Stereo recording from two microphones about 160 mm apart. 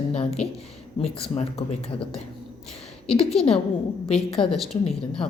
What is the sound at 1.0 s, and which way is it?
Speech, 40° left (ahead or behind).